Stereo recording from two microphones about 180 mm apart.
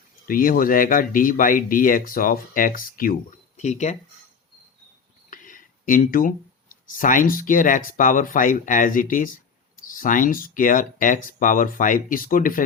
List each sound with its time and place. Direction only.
0.3 s speech: 50° left (ahead or behind)
5.3 s a sound: 45° left (ahead or behind)
6.8 s speech: 45° left (ahead or behind)